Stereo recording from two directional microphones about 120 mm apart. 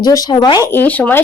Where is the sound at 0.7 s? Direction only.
15° left (ahead or behind).